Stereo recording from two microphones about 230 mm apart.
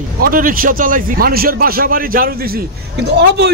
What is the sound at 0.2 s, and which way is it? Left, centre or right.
A man's voice, right.